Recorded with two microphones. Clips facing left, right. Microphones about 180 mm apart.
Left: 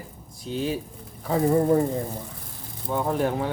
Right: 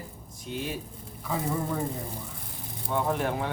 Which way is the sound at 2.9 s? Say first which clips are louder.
Left 3 dB; 35° left (ahead or behind).